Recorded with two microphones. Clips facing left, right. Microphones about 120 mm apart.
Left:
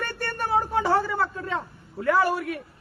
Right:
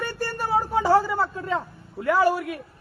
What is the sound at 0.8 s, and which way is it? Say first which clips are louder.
A woman's voice: right 5 dB; 25° right (ahead or behind).